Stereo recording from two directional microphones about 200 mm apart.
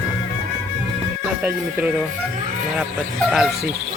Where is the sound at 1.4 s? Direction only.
5° right (ahead or behind).